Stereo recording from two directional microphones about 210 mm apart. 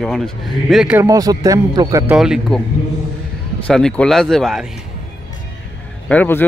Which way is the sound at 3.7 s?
5° left (ahead or behind).